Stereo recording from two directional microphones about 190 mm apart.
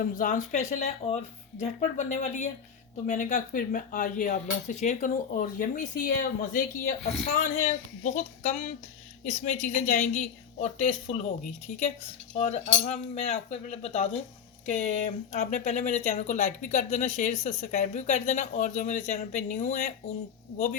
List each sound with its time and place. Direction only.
0.0 s speech: 45° left (ahead or behind)
12.4 s speech: 40° left (ahead or behind)